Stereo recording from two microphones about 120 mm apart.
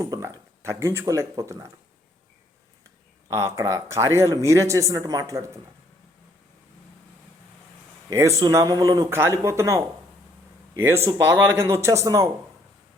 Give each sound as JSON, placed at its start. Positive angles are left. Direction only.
{"t": 0.0, "sound": "speech", "side_deg": -30}
{"t": 3.2, "sound": "speech", "side_deg": -25}
{"t": 8.1, "sound": "speech", "side_deg": -25}